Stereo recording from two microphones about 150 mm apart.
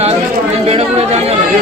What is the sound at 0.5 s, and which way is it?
Speech, 45° right (ahead or behind).